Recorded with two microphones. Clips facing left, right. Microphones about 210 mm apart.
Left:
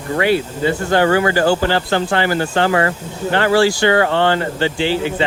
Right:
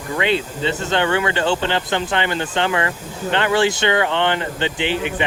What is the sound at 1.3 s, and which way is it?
Speech, 25° right (ahead or behind).